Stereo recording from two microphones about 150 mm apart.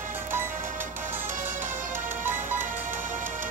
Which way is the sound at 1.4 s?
15° right (ahead or behind).